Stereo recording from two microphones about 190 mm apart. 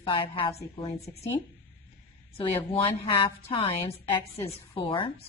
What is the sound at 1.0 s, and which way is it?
A woman's voice, 35° left (ahead or behind).